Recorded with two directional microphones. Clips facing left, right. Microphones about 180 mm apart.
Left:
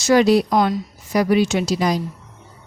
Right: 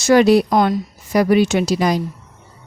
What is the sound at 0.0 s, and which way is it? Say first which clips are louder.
A woman's voice: right 3 dB; 55° right (ahead or behind).